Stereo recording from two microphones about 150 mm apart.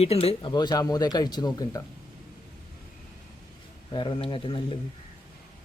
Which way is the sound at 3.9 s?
30° left (ahead or behind).